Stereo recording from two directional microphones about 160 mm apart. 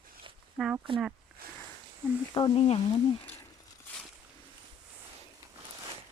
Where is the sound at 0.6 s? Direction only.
5° right (ahead or behind).